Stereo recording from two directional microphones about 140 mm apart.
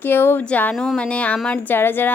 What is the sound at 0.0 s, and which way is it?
Speech, 15° left (ahead or behind).